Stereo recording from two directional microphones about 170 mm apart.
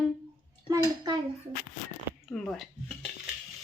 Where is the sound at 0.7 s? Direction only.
25° right (ahead or behind).